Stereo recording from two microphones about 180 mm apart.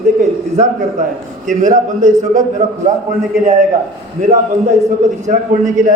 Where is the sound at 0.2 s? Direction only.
40° right (ahead or behind).